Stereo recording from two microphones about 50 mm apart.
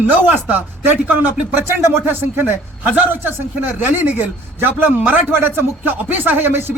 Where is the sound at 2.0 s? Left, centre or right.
Right.